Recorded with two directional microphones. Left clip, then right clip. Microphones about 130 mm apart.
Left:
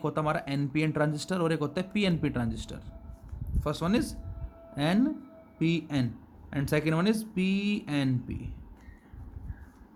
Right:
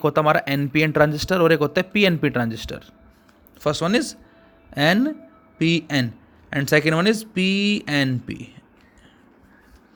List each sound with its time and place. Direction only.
0.0 s speech: 45° right (ahead or behind)